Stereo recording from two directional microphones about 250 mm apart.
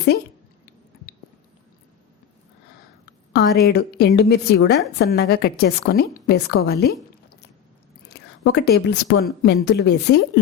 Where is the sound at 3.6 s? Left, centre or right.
Left.